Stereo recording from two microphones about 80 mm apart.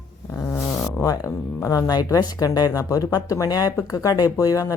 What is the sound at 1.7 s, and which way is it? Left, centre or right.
Speech, left.